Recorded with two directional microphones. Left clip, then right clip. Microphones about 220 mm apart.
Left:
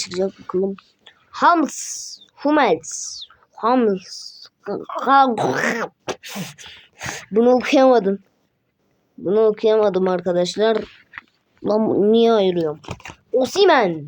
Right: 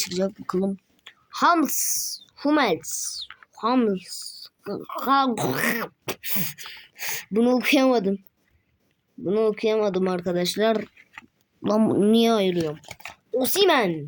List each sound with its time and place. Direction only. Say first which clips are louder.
0.0 s speech: left 3 dB; 50° right (ahead or behind)
1.0 s a woman's voice: left 5 dB; 35° right (ahead or behind)
9.2 s speech: left 6 dB; 35° right (ahead or behind)
11.2 s speech: left 3 dB; 55° right (ahead or behind)
12.5 s speech: left 5 dB; 25° right (ahead or behind)